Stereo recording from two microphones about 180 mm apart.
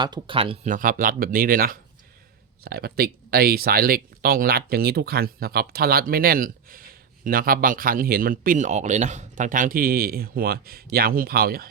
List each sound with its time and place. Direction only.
0.0 s speech: 25° right (ahead or behind)
0.7 s speech: 50° right (ahead or behind)